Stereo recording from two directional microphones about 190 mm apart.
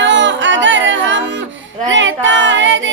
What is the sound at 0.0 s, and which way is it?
Singing, 75° right (ahead or behind).